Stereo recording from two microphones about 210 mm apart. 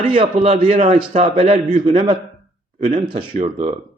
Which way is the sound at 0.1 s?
25° right (ahead or behind).